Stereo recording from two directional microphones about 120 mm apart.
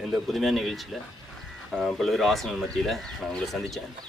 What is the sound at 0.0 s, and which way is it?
Speech, centre (ahead or behind).